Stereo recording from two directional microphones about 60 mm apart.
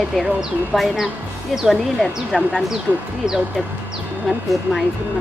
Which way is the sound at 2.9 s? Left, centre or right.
Right.